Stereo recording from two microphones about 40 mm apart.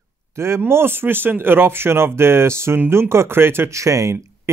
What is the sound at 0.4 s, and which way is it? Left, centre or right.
Speech, right.